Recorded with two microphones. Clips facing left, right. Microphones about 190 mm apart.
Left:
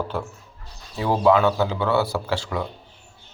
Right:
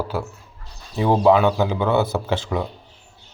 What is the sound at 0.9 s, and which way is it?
Speech, 20° right (ahead or behind).